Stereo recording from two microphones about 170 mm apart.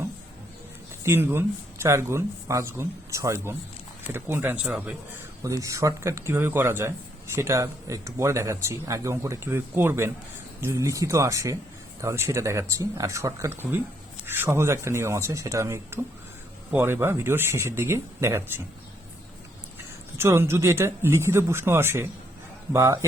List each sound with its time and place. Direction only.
1.0 s speech: 15° right (ahead or behind)
5.4 s speech: 20° right (ahead or behind)
20.1 s speech: 15° right (ahead or behind)